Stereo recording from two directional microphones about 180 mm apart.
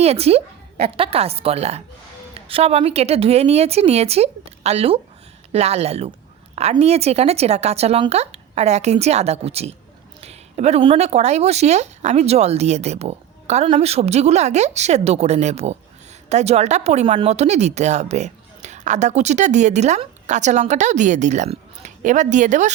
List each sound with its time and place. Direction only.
0.0 s speech: 35° right (ahead or behind)